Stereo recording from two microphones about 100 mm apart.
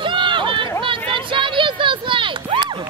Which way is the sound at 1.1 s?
55° right (ahead or behind).